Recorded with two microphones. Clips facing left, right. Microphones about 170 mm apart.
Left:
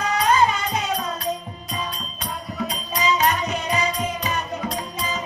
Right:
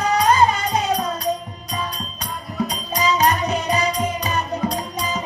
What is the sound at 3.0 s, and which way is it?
Music, 40° right (ahead or behind).